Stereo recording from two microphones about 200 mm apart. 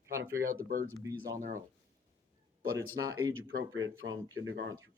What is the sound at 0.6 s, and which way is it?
Speech, 45° right (ahead or behind).